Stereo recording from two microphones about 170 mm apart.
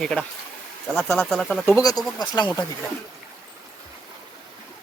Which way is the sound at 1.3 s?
Centre (ahead or behind).